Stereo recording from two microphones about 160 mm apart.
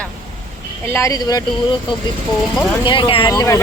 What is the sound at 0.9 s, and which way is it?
Speech, 20° left (ahead or behind).